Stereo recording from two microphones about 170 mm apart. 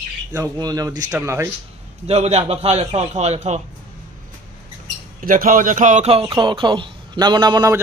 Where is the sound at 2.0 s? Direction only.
40° right (ahead or behind).